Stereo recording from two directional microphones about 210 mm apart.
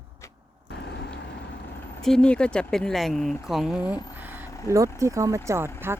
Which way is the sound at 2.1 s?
5° left (ahead or behind).